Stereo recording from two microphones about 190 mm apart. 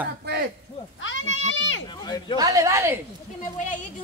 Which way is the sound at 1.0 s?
85° left.